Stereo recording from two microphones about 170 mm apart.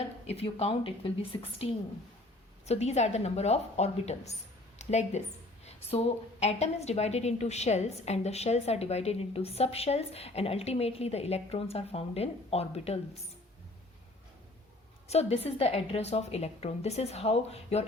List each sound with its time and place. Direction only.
0.3 s a woman's voice: 35° left (ahead or behind)
15.0 s a woman's voice: 40° left (ahead or behind)